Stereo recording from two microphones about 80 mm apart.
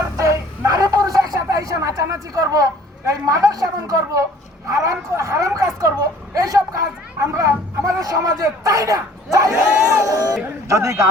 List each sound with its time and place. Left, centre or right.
0.2 s a sound: right
3.1 s speech: right
9.6 s speech: right
9.9 s speech: right